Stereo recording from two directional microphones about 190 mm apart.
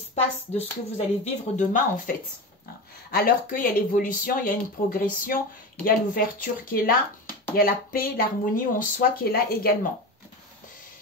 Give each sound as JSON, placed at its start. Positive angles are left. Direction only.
{"t": 0.1, "sound": "speech", "side_deg": 35}
{"t": 3.2, "sound": "speech", "side_deg": 50}